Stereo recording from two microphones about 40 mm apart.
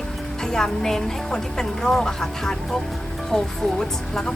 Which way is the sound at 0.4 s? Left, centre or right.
Centre.